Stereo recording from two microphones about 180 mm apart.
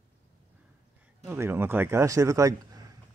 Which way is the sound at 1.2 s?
10° right (ahead or behind).